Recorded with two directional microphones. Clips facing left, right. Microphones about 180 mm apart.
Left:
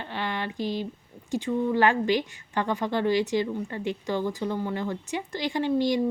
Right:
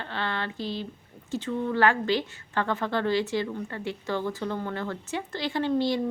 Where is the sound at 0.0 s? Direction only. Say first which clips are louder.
Left 1 dB; 15° left (ahead or behind).